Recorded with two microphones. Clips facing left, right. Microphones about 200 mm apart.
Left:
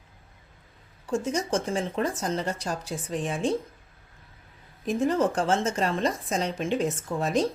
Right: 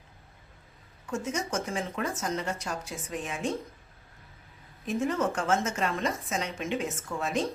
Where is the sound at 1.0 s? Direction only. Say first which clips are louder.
Left 5 dB; 35° left (ahead or behind).